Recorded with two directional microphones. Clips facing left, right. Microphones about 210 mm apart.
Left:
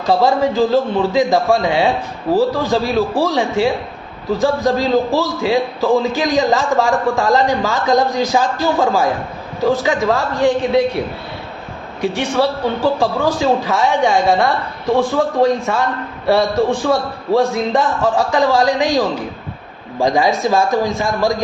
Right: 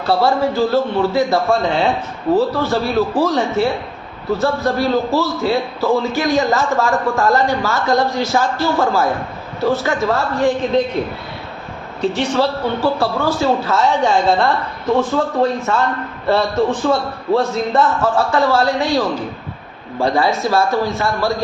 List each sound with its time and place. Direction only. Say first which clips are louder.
0.0 s a man's voice: left 1 dB; 15° left (ahead or behind)